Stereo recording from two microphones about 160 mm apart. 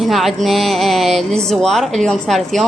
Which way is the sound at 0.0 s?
Centre (ahead or behind).